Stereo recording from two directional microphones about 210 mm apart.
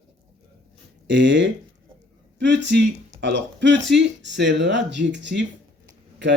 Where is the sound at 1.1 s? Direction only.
55° right (ahead or behind).